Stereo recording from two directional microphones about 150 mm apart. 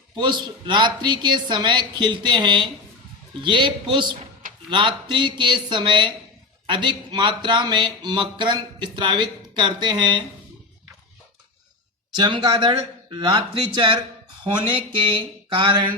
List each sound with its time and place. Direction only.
0.2 s speech: 30° right (ahead or behind)
12.1 s speech: 30° right (ahead or behind)